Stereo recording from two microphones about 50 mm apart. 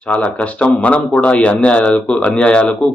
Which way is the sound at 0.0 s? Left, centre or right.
Left.